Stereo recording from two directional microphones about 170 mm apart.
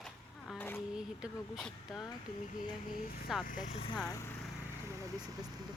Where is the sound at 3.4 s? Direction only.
50° left (ahead or behind).